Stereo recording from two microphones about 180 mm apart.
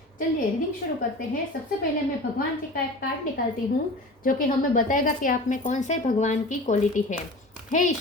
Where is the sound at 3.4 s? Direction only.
55° left (ahead or behind).